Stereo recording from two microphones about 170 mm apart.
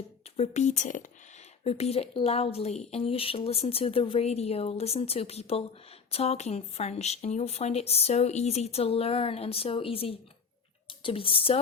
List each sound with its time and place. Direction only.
0.3 s speech: 40° left (ahead or behind)